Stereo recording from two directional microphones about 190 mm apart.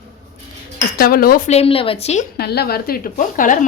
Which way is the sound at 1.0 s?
50° left (ahead or behind).